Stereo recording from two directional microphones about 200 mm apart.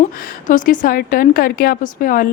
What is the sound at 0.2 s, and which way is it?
A woman's voice, 45° left (ahead or behind).